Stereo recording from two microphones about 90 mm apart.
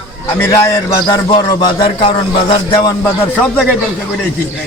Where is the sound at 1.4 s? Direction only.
50° left (ahead or behind).